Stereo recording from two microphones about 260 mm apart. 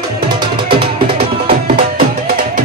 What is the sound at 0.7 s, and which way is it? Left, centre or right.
Music, right.